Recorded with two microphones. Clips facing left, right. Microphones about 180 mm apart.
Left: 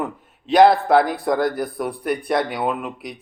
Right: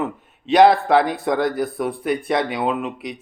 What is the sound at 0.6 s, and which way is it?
Speech, centre (ahead or behind).